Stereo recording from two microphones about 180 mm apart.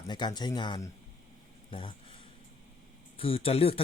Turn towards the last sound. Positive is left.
turn(degrees=35)  # may be behind; listen again after turning